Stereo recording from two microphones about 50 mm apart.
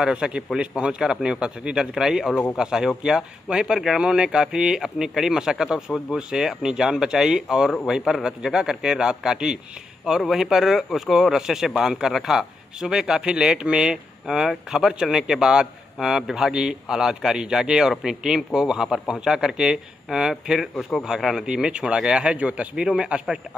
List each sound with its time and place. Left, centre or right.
0.0 s a man's voice: centre